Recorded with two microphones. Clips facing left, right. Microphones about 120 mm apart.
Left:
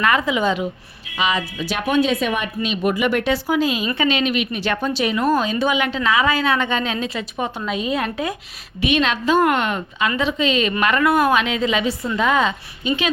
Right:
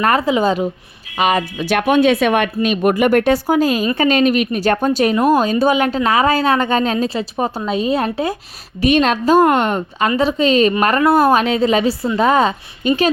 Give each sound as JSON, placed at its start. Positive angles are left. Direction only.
{"t": 0.0, "sound": "a woman's voice", "side_deg": -40}
{"t": 1.1, "sound": "a woman's voice", "side_deg": -55}
{"t": 12.8, "sound": "speech", "side_deg": -50}